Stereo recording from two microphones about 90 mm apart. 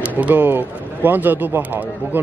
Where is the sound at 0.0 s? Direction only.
15° right (ahead or behind).